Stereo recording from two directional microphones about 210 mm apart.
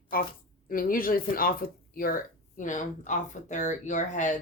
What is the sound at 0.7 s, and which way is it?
Speech, 40° left (ahead or behind).